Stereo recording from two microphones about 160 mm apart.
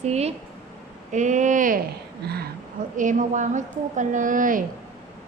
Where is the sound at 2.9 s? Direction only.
55° right (ahead or behind).